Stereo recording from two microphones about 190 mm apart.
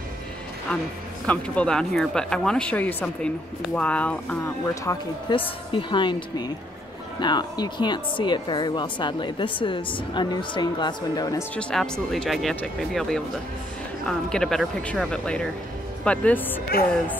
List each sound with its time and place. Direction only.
1.2 s a woman's voice: 5° left (ahead or behind); by 11.4 s 20° left (ahead or behind)
11.5 s speech: 5° left (ahead or behind)